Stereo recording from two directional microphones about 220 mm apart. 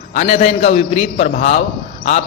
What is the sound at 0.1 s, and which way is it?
A man's voice, 30° left (ahead or behind).